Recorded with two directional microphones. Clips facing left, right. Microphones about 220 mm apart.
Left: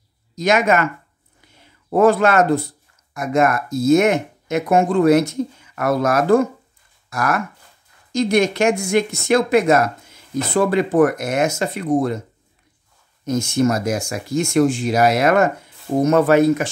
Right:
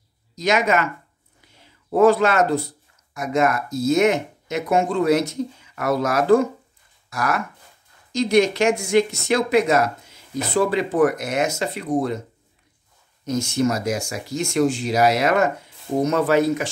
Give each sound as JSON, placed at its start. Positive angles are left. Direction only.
{"t": 0.4, "sound": "speech", "side_deg": 50}
{"t": 1.9, "sound": "speech", "side_deg": 50}
{"t": 13.2, "sound": "speech", "side_deg": 50}